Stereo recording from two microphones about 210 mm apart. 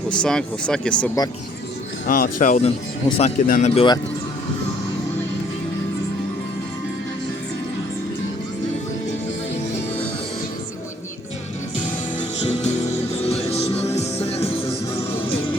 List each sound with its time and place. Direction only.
0.1 s speech: 5° left (ahead or behind)
1.0 s speech: 15° left (ahead or behind)
2.0 s speech: 40° left (ahead or behind)
12.5 s music: 30° left (ahead or behind)